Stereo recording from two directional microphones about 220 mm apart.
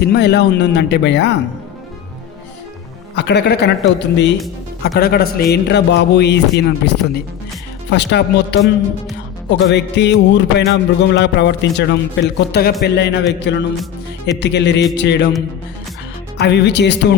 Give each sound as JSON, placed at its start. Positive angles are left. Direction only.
{"t": 0.0, "sound": "music", "side_deg": 45}
{"t": 3.2, "sound": "music", "side_deg": 50}
{"t": 16.4, "sound": "music", "side_deg": 50}